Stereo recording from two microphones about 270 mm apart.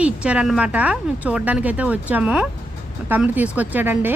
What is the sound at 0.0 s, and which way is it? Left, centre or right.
Speech, centre.